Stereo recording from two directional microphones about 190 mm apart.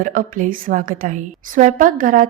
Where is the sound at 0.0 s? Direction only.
45° right (ahead or behind).